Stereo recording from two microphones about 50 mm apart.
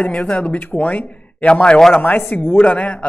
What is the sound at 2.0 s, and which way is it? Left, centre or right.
Speech, left.